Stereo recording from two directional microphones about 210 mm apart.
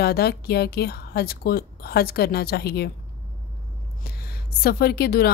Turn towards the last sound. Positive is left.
turn(degrees=50)  # may be behind; listen again after turning